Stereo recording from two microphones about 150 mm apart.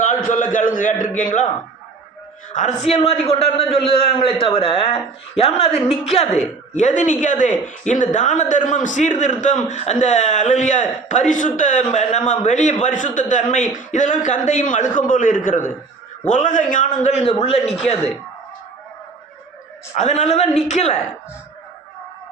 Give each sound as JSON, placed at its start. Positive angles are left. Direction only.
{"t": 0.0, "sound": "a man's voice", "side_deg": 60}
{"t": 2.5, "sound": "a man's voice", "side_deg": 55}
{"t": 20.0, "sound": "a woman's voice", "side_deg": 50}